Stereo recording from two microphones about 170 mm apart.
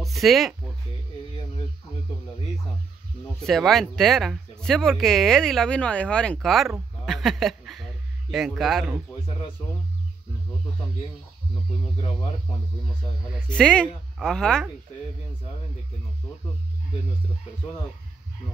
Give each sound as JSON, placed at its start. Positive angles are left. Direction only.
{"t": 0.0, "sound": "speech", "side_deg": 0}
{"t": 3.4, "sound": "speech", "side_deg": 0}
{"t": 13.5, "sound": "speech", "side_deg": 5}